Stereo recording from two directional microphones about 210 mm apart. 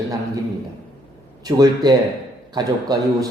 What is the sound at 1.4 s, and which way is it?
A man's voice, 15° right (ahead or behind).